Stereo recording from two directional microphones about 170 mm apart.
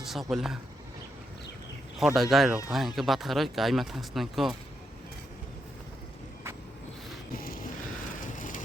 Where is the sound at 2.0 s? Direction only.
Centre (ahead or behind).